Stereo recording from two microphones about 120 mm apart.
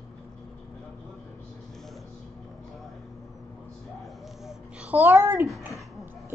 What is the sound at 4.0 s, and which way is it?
Babbling, 5° right (ahead or behind).